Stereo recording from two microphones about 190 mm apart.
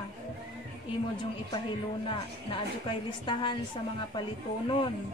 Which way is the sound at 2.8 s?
25° left (ahead or behind).